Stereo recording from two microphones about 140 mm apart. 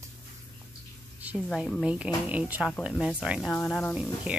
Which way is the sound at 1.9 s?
10° right (ahead or behind).